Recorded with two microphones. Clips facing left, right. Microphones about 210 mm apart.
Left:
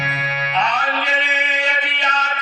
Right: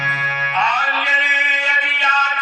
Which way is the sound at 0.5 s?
35° left (ahead or behind).